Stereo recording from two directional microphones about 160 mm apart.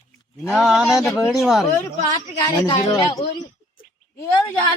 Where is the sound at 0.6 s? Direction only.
Centre (ahead or behind).